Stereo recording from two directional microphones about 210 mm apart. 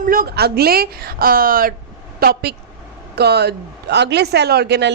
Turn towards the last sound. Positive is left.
turn(degrees=-50)  # may be behind; listen again after turning